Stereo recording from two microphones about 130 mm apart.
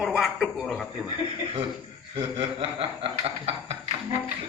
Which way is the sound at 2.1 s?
45° right (ahead or behind).